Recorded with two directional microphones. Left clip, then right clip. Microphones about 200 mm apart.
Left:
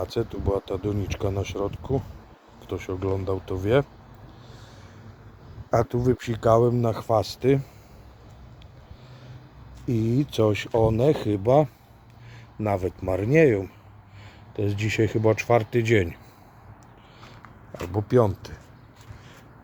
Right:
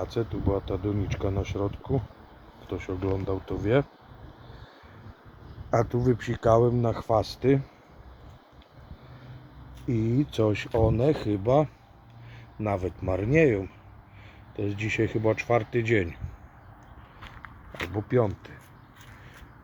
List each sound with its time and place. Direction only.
0.0 s speech: 10° left (ahead or behind)
5.7 s speech: 10° left (ahead or behind)
10.1 s speech: 20° left (ahead or behind)
17.9 s speech: 15° left (ahead or behind)